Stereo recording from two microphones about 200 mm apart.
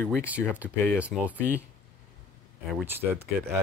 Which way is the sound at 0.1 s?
5° right (ahead or behind).